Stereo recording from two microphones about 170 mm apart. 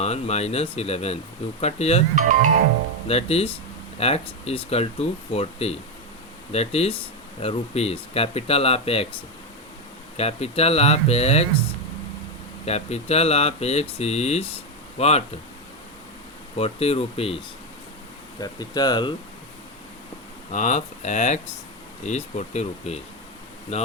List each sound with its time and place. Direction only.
0.0 s speech: 40° left (ahead or behind)
2.1 s speech: 50° right (ahead or behind)
3.1 s speech: 35° left (ahead or behind)
10.2 s speech: 35° left (ahead or behind)
12.6 s speech: 40° left (ahead or behind)
16.6 s speech: 35° left (ahead or behind)
18.3 s speech: 25° left (ahead or behind)
20.5 s speech: 45° left (ahead or behind)